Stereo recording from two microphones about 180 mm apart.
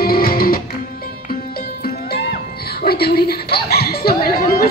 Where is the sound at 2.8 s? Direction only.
60° left (ahead or behind).